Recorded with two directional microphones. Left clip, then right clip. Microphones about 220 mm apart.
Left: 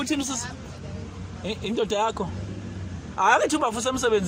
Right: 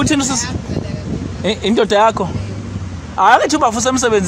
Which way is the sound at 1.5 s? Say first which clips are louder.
Right 12 dB; 30° right (ahead or behind).